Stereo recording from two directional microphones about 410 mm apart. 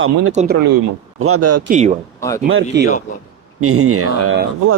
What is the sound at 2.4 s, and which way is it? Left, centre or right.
Speech, right.